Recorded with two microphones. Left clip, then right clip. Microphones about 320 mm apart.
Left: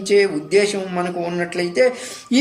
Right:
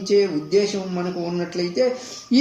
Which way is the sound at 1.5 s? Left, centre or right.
Left.